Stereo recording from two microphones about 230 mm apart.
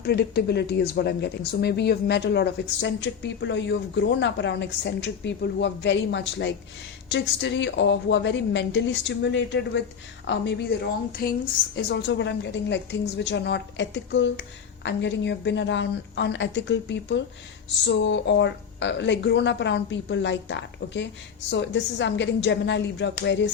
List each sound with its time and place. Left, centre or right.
0.0 s speech: left